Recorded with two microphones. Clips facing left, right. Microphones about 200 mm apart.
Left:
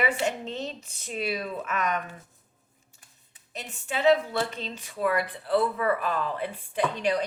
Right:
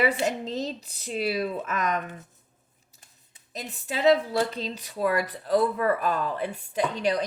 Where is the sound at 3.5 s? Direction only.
35° right (ahead or behind).